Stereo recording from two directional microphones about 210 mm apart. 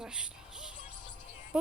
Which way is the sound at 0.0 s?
5° right (ahead or behind).